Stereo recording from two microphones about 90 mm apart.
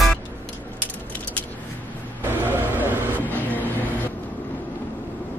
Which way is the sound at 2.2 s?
25° right (ahead or behind).